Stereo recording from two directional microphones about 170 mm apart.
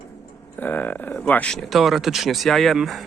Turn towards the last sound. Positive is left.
turn(degrees=0)  # may be behind; listen again after turning